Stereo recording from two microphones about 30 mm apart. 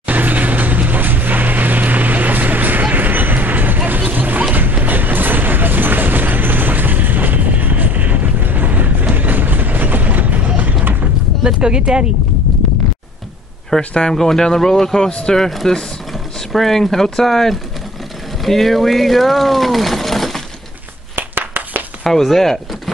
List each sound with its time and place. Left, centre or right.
0.0 s mechanisms: right
4.6 s vehicle: right
11.4 s a sound: right
13.7 s speech: left
14.1 s speech: centre
15.0 s speech: left
15.6 s speech: left; by 20.4 s centre
22.0 s speech: centre